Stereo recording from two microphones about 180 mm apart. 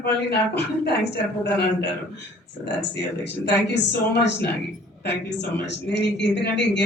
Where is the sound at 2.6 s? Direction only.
75° left (ahead or behind).